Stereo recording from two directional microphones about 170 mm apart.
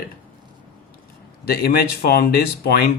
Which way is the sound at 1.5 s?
70° left (ahead or behind).